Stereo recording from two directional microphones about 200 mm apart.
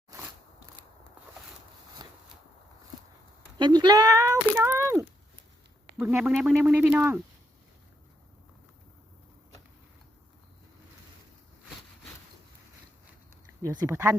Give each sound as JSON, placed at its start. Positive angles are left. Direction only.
{"t": 3.6, "sound": "speech", "side_deg": -20}
{"t": 6.0, "sound": "speech", "side_deg": -10}
{"t": 13.8, "sound": "speech", "side_deg": -15}